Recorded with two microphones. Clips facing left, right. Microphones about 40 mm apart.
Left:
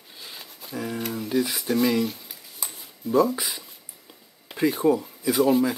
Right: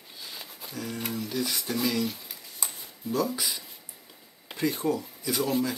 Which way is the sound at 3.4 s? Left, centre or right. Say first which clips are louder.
Left 1 dB; centre.